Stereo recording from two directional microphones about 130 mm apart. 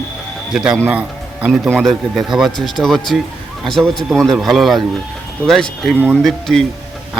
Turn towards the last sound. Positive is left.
turn(degrees=0)  # may be behind; listen again after turning